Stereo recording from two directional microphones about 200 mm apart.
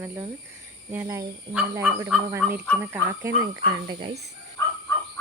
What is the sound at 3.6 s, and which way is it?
Speech, 50° left (ahead or behind).